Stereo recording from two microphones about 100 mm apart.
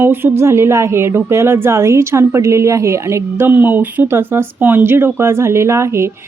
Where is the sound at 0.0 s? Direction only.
20° right (ahead or behind).